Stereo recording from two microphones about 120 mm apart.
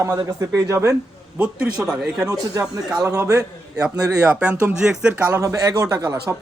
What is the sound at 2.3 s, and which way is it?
Speech, 30° right (ahead or behind).